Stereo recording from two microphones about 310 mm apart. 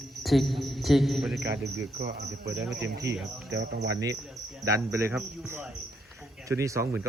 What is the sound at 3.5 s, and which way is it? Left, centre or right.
Speech, right.